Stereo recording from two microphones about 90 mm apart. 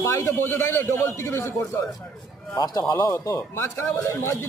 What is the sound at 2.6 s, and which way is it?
Speech, 45° left (ahead or behind).